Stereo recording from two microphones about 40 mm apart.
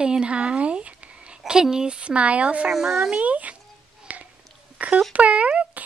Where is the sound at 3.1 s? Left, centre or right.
Right.